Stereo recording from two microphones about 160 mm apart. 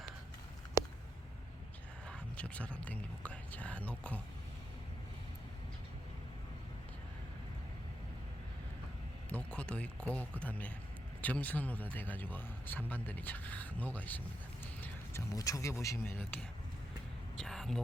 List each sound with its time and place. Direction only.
2.0 s speech: 10° left (ahead or behind)
9.3 s speech: 5° left (ahead or behind)
17.3 s vehicle: 5° left (ahead or behind)